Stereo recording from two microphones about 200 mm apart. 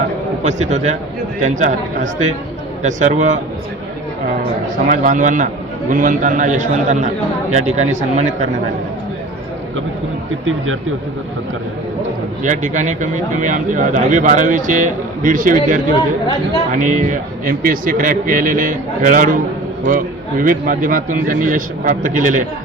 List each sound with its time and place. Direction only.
0.4 s speech: 35° right (ahead or behind)
4.4 s speech: 40° right (ahead or behind)
12.4 s a man's voice: 40° right (ahead or behind)